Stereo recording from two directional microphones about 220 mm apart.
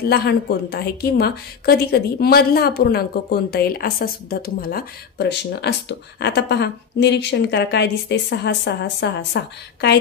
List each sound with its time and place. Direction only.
0.0 s a woman's voice: 45° left (ahead or behind)